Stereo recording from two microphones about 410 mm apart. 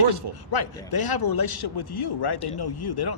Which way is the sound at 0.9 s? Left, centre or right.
Left.